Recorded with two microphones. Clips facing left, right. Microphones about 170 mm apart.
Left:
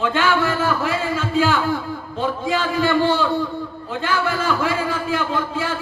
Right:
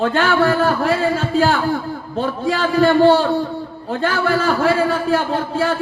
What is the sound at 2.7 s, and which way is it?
Speech, 45° right (ahead or behind).